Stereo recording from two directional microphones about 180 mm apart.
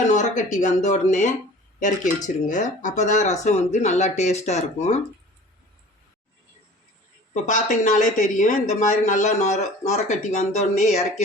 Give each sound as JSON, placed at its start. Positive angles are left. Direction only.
{"t": 0.1, "sound": "speech", "side_deg": 45}
{"t": 7.4, "sound": "speech", "side_deg": 45}